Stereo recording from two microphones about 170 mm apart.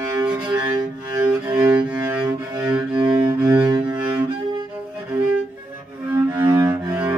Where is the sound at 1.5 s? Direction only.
5° right (ahead or behind).